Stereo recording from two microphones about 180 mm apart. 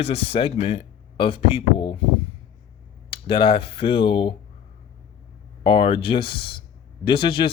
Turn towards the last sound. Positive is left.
turn(degrees=30)  # may be behind; listen again after turning